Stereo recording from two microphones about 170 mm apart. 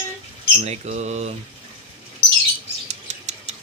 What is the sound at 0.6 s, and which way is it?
Speech, 40° right (ahead or behind).